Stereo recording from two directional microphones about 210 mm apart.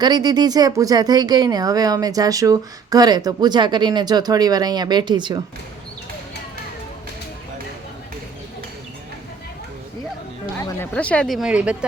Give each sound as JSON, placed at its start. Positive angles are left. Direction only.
{"t": 0.0, "sound": "speech", "side_deg": -20}
{"t": 10.6, "sound": "speech", "side_deg": 15}